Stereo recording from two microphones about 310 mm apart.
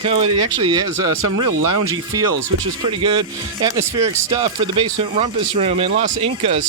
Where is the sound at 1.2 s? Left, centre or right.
Right.